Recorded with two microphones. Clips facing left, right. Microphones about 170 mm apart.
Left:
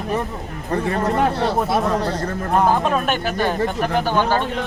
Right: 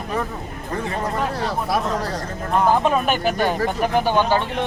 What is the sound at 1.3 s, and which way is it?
Speech, 25° left (ahead or behind).